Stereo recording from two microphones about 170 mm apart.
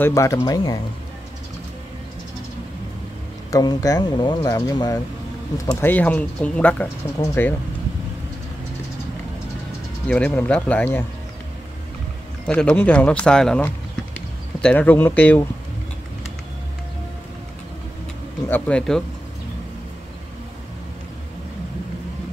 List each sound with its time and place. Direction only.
0.0 s speech: 20° left (ahead or behind)
3.5 s speech: 20° left (ahead or behind)
10.0 s speech: 10° left (ahead or behind)
12.4 s speech: 5° left (ahead or behind)
18.5 s speech: 5° left (ahead or behind)